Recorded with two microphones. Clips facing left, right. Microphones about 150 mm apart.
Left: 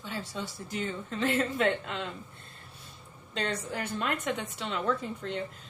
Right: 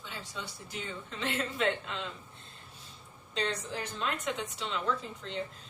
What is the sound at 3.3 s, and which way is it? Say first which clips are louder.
A woman's voice: left 1 dB; 55° left (ahead or behind).